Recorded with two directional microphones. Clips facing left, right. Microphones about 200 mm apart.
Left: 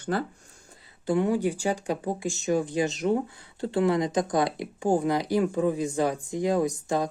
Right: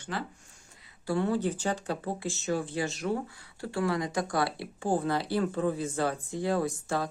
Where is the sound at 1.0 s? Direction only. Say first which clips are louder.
Left 4 dB; 15° left (ahead or behind).